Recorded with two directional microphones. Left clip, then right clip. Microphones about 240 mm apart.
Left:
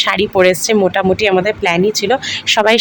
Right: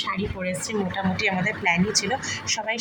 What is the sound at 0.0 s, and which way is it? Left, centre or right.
Speech, left.